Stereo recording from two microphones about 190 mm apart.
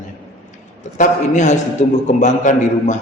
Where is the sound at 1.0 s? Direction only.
40° left (ahead or behind).